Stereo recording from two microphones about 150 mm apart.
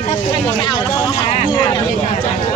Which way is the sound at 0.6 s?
30° left (ahead or behind).